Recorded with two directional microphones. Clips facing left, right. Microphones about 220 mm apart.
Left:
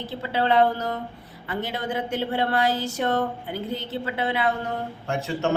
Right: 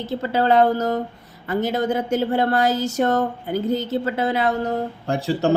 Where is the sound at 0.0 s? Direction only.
45° right (ahead or behind).